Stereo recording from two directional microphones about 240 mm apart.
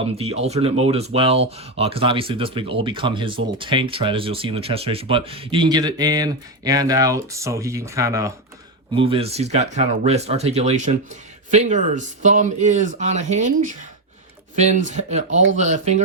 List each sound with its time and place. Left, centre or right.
0.0 s speech: right